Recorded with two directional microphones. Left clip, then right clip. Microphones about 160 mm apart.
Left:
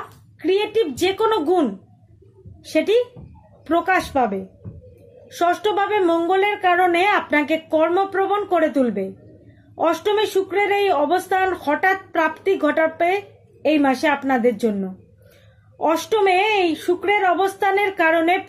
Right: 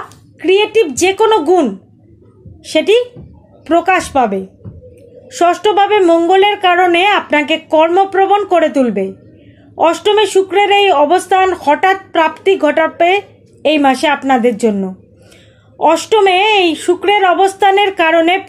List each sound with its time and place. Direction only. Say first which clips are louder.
0.4 s speech: right 9 dB; 25° right (ahead or behind)
5.4 s speech: right 9 dB; 20° right (ahead or behind)
15.8 s speech: right 9 dB; 20° right (ahead or behind)